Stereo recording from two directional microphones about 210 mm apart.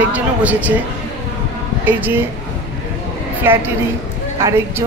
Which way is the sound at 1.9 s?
10° right (ahead or behind).